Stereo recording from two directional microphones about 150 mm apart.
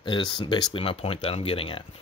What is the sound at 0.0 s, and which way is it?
Speech, 30° left (ahead or behind).